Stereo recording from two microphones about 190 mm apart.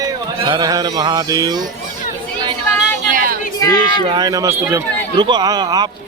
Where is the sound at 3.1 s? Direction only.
45° right (ahead or behind).